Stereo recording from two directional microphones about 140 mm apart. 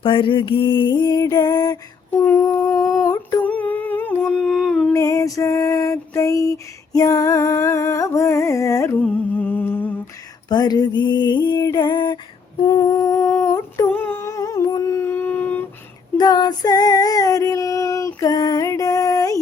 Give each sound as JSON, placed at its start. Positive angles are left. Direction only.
{"t": 0.0, "sound": "mantra", "side_deg": 40}
{"t": 2.0, "sound": "humming", "side_deg": 15}
{"t": 3.4, "sound": "humming", "side_deg": 10}
{"t": 4.9, "sound": "female singing", "side_deg": 25}
{"t": 6.9, "sound": "humming", "side_deg": 25}
{"t": 10.5, "sound": "a sound", "side_deg": 30}
{"t": 12.6, "sound": "humming", "side_deg": 25}
{"t": 16.1, "sound": "female singing", "side_deg": 30}